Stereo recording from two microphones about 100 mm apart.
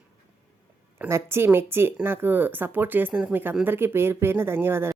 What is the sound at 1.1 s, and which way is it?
Speech, 25° right (ahead or behind).